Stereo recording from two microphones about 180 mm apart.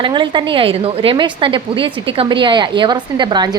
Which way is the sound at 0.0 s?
25° right (ahead or behind).